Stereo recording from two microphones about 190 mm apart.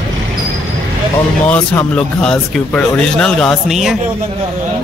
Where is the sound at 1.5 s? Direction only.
5° left (ahead or behind).